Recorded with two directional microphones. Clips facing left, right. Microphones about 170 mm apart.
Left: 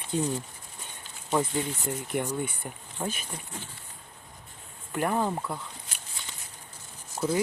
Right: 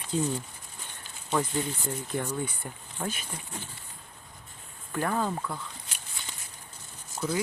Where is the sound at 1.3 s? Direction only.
15° left (ahead or behind).